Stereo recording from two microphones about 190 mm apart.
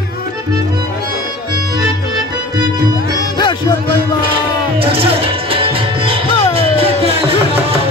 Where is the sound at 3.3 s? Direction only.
25° left (ahead or behind).